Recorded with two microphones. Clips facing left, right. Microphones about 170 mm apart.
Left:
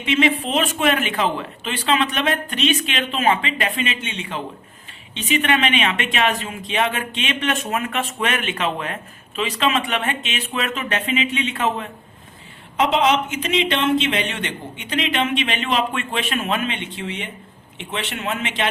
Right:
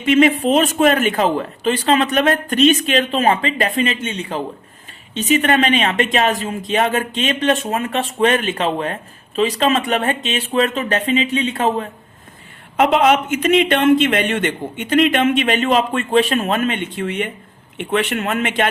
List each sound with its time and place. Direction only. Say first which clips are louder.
0.0 s speech: right 6 dB; 45° right (ahead or behind)
12.7 s a man's voice: right 4 dB; 55° right (ahead or behind)